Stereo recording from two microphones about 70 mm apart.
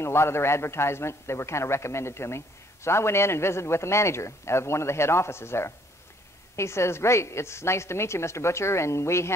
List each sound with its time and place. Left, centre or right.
0.0 s a man's voice: left